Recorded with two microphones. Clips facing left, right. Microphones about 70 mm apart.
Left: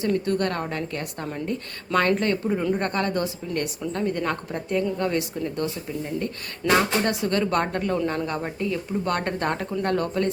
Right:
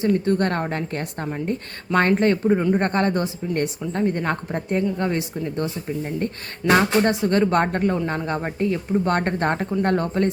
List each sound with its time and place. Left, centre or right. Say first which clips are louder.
0.0 s a woman's voice: right 3 dB; right
6.1 s speech: right 2 dB; right